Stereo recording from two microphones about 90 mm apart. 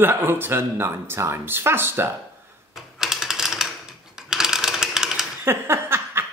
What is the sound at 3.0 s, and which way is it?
Typewriter, 5° right (ahead or behind).